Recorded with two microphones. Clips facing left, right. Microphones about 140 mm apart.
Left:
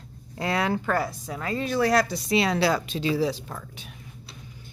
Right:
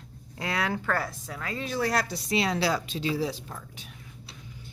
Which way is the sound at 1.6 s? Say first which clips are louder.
Left 6 dB; 70° left (ahead or behind).